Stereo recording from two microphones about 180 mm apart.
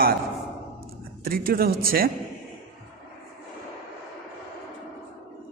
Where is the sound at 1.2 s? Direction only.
55° right (ahead or behind).